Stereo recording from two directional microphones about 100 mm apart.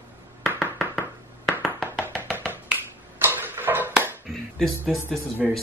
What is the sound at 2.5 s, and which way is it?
Finger snapping, 20° right (ahead or behind).